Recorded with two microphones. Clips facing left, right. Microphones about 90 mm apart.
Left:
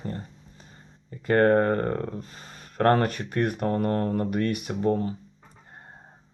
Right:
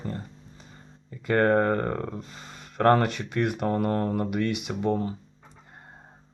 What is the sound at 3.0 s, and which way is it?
Speech, 40° left (ahead or behind).